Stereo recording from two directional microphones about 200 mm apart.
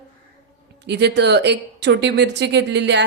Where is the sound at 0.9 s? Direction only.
55° right (ahead or behind).